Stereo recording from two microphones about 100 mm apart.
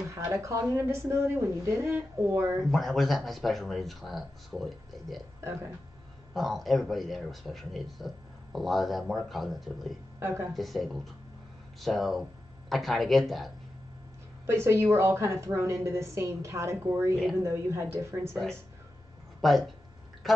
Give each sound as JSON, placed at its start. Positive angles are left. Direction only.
{"t": 0.2, "sound": "a woman's voice", "side_deg": -25}
{"t": 2.6, "sound": "speech", "side_deg": 0}
{"t": 5.4, "sound": "speech", "side_deg": -25}
{"t": 6.3, "sound": "speech", "side_deg": 0}
{"t": 10.1, "sound": "speech", "side_deg": -25}
{"t": 10.5, "sound": "speech", "side_deg": 0}
{"t": 14.4, "sound": "a woman's voice", "side_deg": -25}
{"t": 17.1, "sound": "speech", "side_deg": 0}
{"t": 17.4, "sound": "a woman's voice", "side_deg": -25}
{"t": 18.3, "sound": "speech", "side_deg": 5}